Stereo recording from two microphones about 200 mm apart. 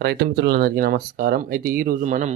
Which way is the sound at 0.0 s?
55° right (ahead or behind).